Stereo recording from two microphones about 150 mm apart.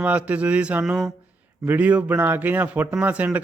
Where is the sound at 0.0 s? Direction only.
10° right (ahead or behind).